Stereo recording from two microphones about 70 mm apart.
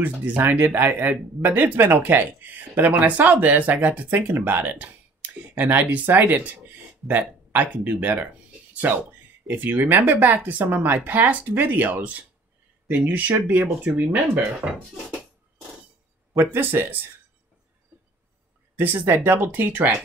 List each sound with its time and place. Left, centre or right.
0.0 s speech: right
16.3 s speech: right
18.8 s speech: right